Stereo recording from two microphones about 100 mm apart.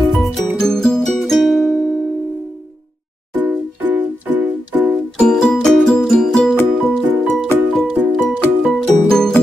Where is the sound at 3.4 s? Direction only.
15° right (ahead or behind).